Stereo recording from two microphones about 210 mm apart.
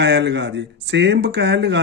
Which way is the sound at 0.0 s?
55° right (ahead or behind).